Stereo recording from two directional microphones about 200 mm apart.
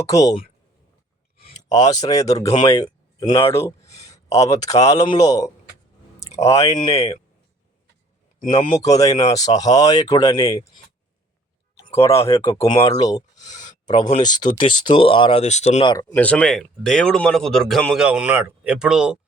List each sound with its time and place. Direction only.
0.1 s speech: 15° left (ahead or behind)
1.5 s speech: 20° left (ahead or behind)
6.7 s speech: 20° left (ahead or behind)
8.4 s speech: 20° left (ahead or behind)
11.9 s speech: 15° left (ahead or behind)
13.4 s a sound: 20° left (ahead or behind)
14.2 s speech: 20° left (ahead or behind)
15.8 s speech: 20° left (ahead or behind)
16.1 s speech: 5° left (ahead or behind)